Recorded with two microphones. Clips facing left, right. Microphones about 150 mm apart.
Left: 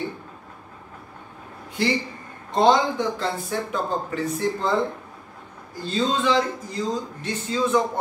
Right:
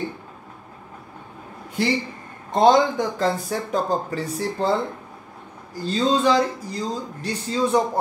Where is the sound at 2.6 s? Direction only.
45° right (ahead or behind).